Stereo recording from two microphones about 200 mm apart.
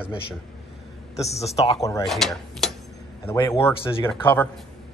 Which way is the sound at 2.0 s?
Centre (ahead or behind).